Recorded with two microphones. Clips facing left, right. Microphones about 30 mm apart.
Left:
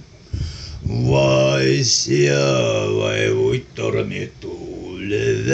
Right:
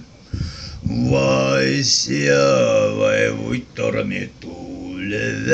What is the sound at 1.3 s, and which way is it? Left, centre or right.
Speech, right.